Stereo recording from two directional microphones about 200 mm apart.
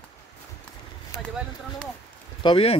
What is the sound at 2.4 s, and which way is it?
Speech, 25° left (ahead or behind).